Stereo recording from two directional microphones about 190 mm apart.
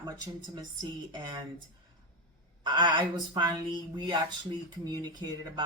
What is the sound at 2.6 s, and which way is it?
Speech, 25° right (ahead or behind).